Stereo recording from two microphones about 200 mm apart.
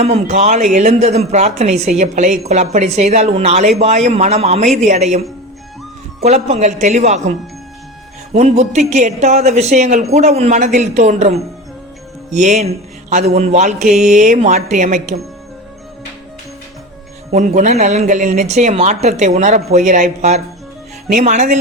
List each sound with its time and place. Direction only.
0.0 s speech: 35° right (ahead or behind)
6.2 s speech: 35° right (ahead or behind)
17.3 s speech: 35° right (ahead or behind)